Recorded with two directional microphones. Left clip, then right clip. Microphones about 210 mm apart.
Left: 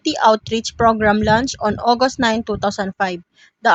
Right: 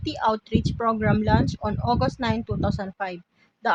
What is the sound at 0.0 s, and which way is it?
Speech, 35° left (ahead or behind).